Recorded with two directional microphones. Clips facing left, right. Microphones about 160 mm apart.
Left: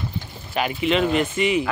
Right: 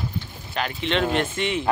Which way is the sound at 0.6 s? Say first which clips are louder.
Left 4 dB; 10° left (ahead or behind).